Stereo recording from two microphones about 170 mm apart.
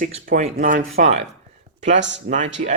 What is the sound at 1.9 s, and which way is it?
Speech, 90° right.